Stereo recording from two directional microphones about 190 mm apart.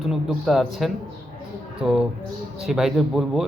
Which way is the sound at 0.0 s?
Centre (ahead or behind).